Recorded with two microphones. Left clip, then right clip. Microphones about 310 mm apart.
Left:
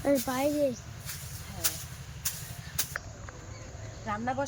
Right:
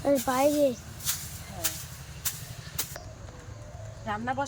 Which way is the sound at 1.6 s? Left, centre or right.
Centre.